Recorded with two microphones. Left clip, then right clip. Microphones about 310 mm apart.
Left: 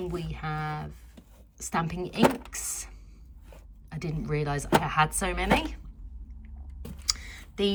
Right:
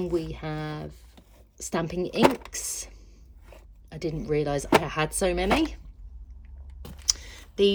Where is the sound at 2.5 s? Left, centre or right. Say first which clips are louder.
Right 2 dB; centre.